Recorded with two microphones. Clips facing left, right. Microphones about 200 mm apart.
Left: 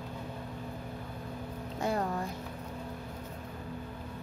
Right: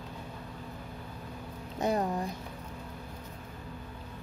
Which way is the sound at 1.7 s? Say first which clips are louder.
Right 3 dB; 20° right (ahead or behind).